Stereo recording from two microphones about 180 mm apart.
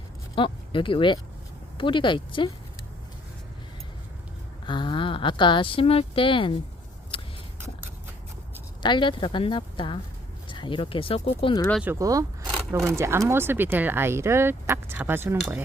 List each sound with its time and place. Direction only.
0.3 s speech: 30° left (ahead or behind)
4.6 s speech: 25° left (ahead or behind)
7.1 s vehicle: 30° left (ahead or behind)
8.8 s speech: 25° left (ahead or behind)
11.8 s speech: 15° right (ahead or behind)